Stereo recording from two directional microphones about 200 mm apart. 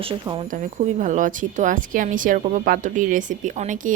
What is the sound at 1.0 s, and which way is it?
Speech, 40° right (ahead or behind).